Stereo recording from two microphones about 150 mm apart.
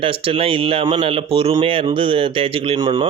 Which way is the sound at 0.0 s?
40° right (ahead or behind).